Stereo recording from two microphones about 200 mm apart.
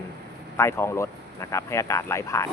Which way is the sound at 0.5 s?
10° left (ahead or behind).